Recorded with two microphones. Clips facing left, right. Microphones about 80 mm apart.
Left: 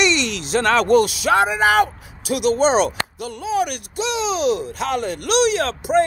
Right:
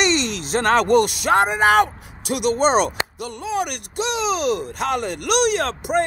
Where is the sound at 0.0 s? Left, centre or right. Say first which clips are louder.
Left 1 dB; right.